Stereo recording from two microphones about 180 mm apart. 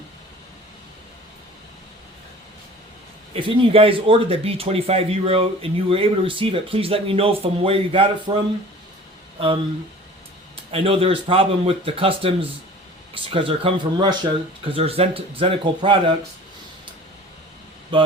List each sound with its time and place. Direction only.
3.3 s speech: 30° right (ahead or behind)
10.7 s speech: 30° right (ahead or behind)
17.9 s speech: 30° right (ahead or behind)